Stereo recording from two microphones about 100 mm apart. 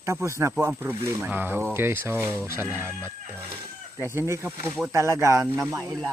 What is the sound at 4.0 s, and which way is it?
Speech, 25° right (ahead or behind).